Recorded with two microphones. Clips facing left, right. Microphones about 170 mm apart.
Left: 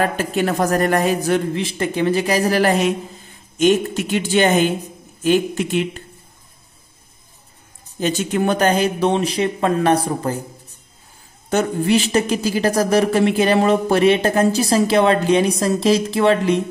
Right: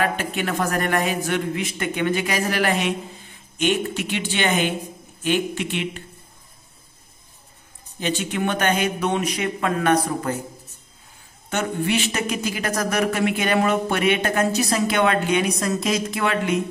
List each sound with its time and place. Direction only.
0.0 s speech: 40° left (ahead or behind)
8.0 s speech: 40° left (ahead or behind)
11.5 s speech: 35° left (ahead or behind)